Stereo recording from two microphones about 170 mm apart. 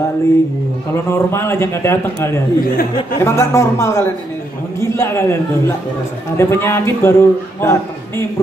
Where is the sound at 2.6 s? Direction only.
60° left (ahead or behind).